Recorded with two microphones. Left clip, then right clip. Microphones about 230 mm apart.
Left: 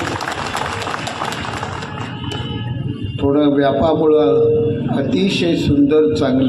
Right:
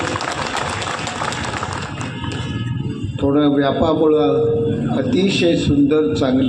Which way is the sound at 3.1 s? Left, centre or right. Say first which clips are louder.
Left 1 dB; left.